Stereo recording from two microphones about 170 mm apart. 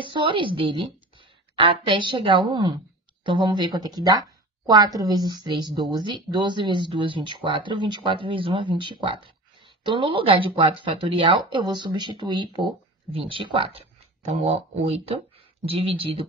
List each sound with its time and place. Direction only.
0.0 s a woman's voice: 30° right (ahead or behind)